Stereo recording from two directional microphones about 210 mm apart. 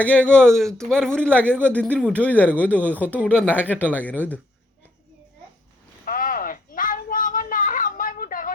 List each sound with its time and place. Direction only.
0.0 s speech: 5° left (ahead or behind)
2.8 s speech: 10° right (ahead or behind)
3.5 s speech: 10° left (ahead or behind)
6.1 s a sound: 40° left (ahead or behind)